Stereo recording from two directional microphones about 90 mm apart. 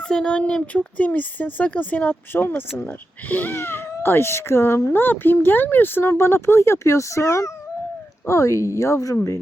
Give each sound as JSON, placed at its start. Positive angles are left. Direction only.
{"t": 0.0, "sound": "speech", "side_deg": 10}